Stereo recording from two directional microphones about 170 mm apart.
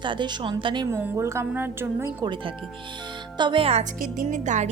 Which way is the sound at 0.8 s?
15° right (ahead or behind).